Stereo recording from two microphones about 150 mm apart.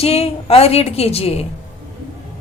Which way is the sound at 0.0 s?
40° left (ahead or behind).